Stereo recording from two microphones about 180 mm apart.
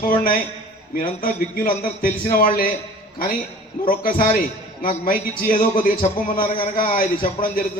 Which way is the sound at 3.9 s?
50° left (ahead or behind).